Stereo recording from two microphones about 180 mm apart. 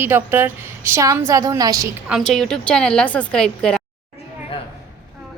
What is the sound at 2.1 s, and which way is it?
A woman's voice, centre (ahead or behind).